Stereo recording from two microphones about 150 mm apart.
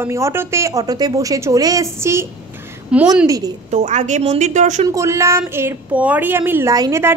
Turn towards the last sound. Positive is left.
turn(degrees=-20)  # may be behind; listen again after turning